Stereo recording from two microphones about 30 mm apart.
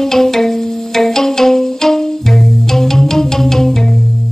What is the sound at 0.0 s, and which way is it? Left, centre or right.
Music, centre.